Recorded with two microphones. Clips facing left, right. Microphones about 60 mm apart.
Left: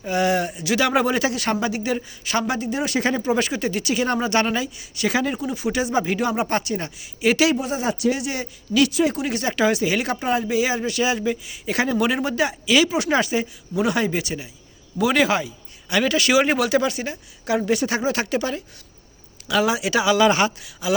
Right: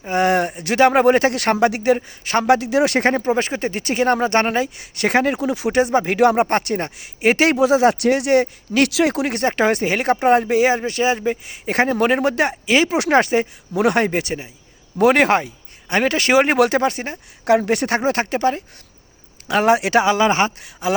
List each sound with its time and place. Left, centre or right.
0.1 s speech: right
2.0 s speech: right
2.5 s speech: right
3.0 s speech: right
5.7 s speech: right
6.1 s speech: right
7.7 s speech: right
8.9 s speech: right
20.6 s speech: right